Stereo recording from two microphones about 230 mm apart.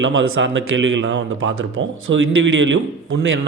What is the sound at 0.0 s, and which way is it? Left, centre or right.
A man's voice, right.